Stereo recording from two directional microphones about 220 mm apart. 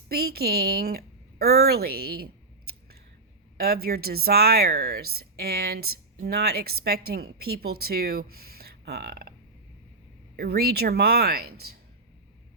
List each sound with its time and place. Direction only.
0.1 s a woman's voice: 45° right (ahead or behind)
10.3 s a woman's voice: 45° right (ahead or behind)